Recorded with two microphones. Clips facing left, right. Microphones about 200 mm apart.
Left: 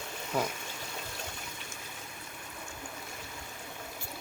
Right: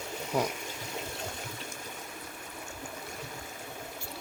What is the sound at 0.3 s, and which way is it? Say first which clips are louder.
Speech: right 2 dB; 10° right (ahead or behind).